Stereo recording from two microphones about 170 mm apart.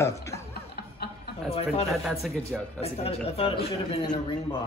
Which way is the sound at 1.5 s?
35° left (ahead or behind).